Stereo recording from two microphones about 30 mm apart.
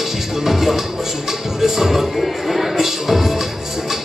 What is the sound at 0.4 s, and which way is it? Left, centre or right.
Music, centre.